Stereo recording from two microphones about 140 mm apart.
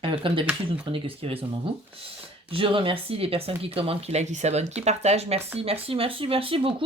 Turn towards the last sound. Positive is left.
turn(degrees=-40)  # may be behind; listen again after turning